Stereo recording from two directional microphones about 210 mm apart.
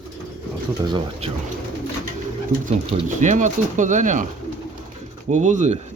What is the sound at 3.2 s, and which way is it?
A man's voice, 35° right (ahead or behind).